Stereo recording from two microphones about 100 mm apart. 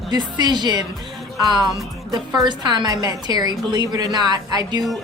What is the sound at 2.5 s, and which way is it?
A woman's voice, 45° right (ahead or behind).